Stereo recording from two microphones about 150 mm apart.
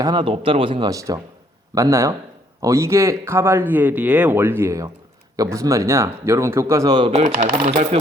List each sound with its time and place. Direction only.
0.0 s a man's voice: 30° right (ahead or behind)
7.3 s speech: 70° right (ahead or behind)
7.7 s speech: 45° right (ahead or behind)